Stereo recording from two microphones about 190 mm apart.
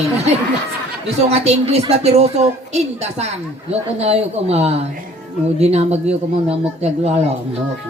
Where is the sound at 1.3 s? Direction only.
35° right (ahead or behind).